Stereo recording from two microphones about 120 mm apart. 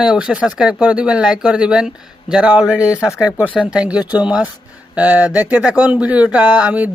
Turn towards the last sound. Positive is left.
turn(degrees=-10)  # may be behind; listen again after turning